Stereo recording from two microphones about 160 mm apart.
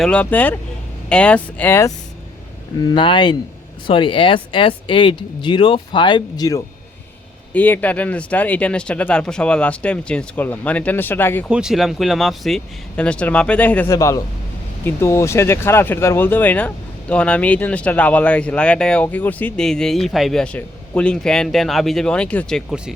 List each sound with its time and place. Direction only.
0.0 s speech: 5° left (ahead or behind)
2.8 s speech: 30° left (ahead or behind)
7.5 s speech: 10° left (ahead or behind)
11.4 s speech: 5° right (ahead or behind)